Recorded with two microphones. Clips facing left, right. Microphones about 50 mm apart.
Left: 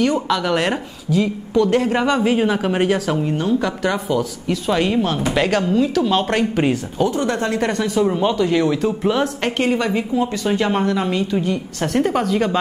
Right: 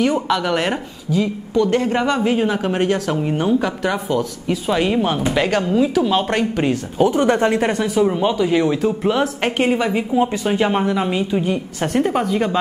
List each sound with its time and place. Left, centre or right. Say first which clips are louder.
0.0 s a woman's voice: even; centre
5.3 s a woman's voice: left 2 dB; centre
7.0 s speech: right 6 dB; right
7.5 s speech: right 1 dB; centre
10.1 s speech: right 3 dB; right; by 12.5 s centre